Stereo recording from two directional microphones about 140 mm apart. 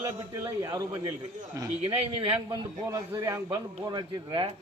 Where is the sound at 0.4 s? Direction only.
25° right (ahead or behind).